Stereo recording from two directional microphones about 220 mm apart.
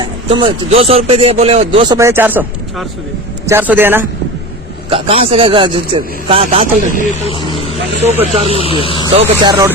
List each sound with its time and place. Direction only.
0.0 s a man's voice: 20° right (ahead or behind)
2.0 s a man's voice: 10° right (ahead or behind)
4.9 s a man's voice: 25° right (ahead or behind)
7.3 s vehicle: 25° left (ahead or behind)
8.0 s a man's voice: 30° right (ahead or behind)